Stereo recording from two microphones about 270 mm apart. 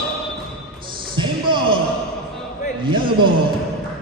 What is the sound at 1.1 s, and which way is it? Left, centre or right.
Music, centre.